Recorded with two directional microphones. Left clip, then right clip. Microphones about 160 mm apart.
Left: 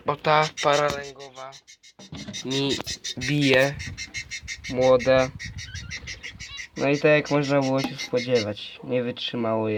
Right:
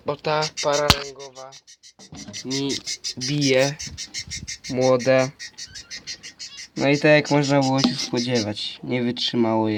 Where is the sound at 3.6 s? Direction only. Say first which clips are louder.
Right 1 dB; 40° right (ahead or behind).